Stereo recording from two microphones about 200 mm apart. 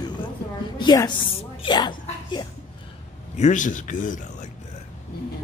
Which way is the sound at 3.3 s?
40° left (ahead or behind).